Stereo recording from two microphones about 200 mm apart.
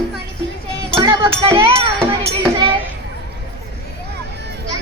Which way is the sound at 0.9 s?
25° right (ahead or behind).